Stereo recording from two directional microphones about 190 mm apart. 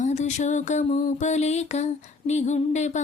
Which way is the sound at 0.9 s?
35° left (ahead or behind).